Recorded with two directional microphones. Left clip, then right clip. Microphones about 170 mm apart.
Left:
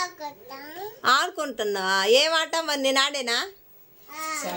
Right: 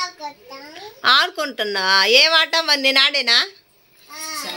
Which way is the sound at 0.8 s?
Centre (ahead or behind).